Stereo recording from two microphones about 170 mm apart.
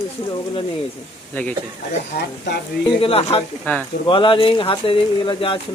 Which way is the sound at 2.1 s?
75° left (ahead or behind).